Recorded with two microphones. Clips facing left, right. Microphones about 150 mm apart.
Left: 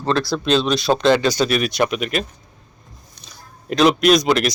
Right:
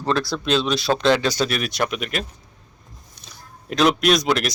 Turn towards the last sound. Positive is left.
turn(degrees=0)  # may be behind; listen again after turning